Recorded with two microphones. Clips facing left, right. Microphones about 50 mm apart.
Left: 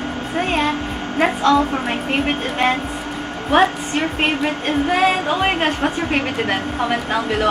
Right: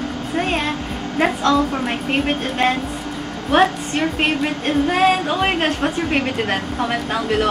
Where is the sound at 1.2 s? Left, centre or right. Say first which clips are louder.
Left 1 dB; centre.